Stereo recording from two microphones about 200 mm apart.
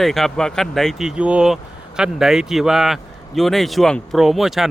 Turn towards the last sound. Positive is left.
turn(degrees=0)  # may be behind; listen again after turning